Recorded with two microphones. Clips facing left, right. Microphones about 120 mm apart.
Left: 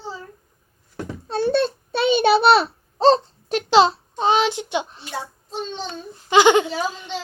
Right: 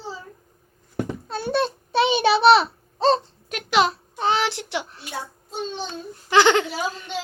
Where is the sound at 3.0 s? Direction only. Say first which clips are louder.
Left 4 dB; 35° left (ahead or behind).